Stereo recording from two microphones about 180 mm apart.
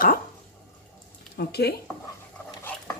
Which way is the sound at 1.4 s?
65° left (ahead or behind).